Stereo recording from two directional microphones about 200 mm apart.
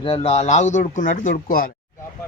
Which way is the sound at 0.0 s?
30° left (ahead or behind).